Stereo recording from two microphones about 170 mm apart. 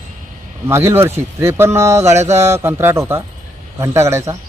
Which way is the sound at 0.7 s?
15° right (ahead or behind).